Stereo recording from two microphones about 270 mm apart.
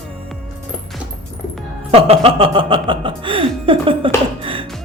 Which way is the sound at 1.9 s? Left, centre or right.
Right.